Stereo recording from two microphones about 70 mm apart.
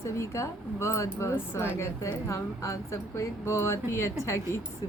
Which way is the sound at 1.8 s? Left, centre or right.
Left.